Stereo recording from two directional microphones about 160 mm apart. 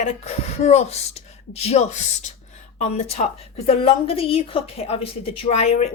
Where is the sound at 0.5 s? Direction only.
40° left (ahead or behind).